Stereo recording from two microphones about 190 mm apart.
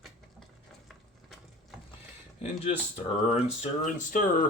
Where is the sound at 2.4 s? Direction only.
35° left (ahead or behind).